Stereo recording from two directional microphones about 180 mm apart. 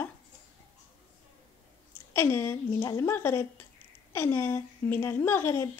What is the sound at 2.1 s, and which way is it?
Speech, 15° left (ahead or behind).